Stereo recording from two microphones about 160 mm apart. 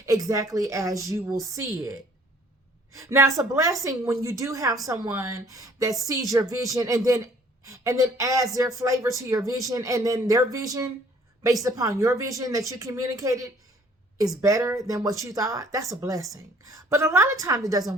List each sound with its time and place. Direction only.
0.0 s speech: 20° right (ahead or behind)